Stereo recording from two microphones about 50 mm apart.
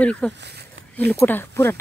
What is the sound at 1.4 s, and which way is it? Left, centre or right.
Speech, left.